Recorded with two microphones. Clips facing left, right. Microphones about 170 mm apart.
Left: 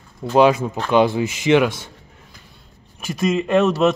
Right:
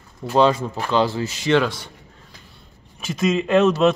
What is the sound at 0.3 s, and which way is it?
Speech, 15° left (ahead or behind).